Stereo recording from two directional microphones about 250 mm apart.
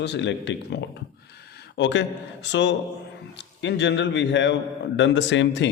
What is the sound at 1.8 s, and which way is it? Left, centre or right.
A man's voice, left.